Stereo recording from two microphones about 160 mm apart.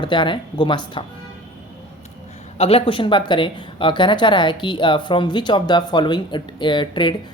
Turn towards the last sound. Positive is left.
turn(degrees=30)  # may be behind; listen again after turning